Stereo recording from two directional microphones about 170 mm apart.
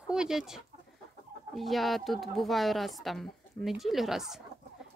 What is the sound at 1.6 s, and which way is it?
Speech, centre (ahead or behind).